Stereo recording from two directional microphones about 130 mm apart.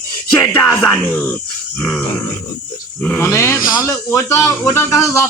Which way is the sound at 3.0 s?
20° left (ahead or behind).